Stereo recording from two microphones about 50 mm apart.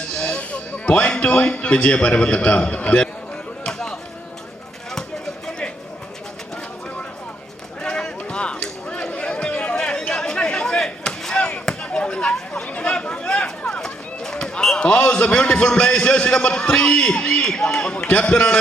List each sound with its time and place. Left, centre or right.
0.3 s music: left
1.5 s a man's voice: left
3.6 s chop: centre
5.5 s a sound: centre
7.8 s a sound: centre
9.7 s chop: centre
11.3 s chop: left
12.6 s chatter: left
13.0 s a sound: left